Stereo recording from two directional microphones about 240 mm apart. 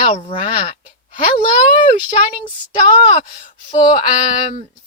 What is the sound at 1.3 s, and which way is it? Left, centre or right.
Speech, left.